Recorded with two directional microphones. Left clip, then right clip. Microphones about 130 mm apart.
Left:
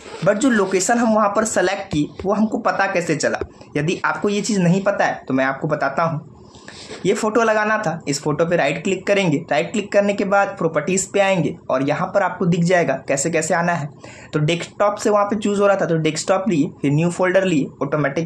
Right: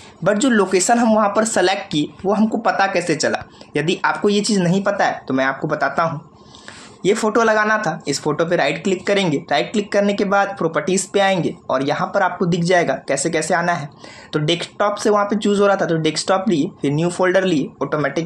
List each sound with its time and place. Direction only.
0.2 s speech: 30° right (ahead or behind)